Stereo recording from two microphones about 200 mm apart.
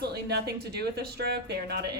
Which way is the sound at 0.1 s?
55° right (ahead or behind).